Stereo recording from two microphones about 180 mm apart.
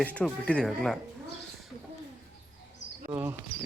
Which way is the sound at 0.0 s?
5° left (ahead or behind).